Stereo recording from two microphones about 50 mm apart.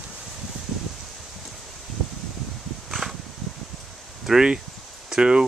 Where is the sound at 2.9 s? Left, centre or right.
Centre.